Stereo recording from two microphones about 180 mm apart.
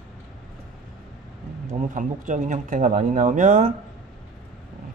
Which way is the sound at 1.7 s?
45° right (ahead or behind).